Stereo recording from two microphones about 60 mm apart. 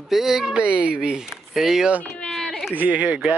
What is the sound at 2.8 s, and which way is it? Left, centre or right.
Speech, right.